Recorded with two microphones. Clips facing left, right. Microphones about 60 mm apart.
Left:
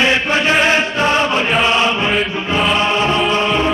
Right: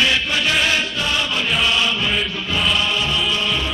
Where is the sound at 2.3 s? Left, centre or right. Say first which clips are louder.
Left 5 dB; left.